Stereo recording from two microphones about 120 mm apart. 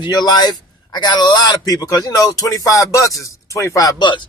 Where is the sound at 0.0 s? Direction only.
35° left (ahead or behind).